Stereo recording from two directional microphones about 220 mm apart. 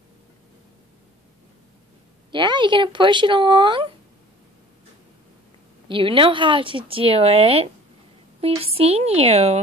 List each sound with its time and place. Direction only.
2.3 s speech: 20° right (ahead or behind)
5.9 s speech: 25° right (ahead or behind)